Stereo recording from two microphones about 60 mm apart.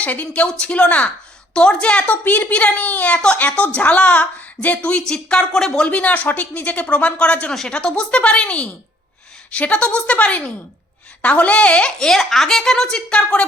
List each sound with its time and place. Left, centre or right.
0.0 s a woman's voice: left